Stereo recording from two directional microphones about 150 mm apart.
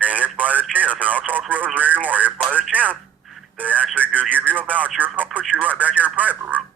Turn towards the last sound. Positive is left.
turn(degrees=-10)  # may be behind; listen again after turning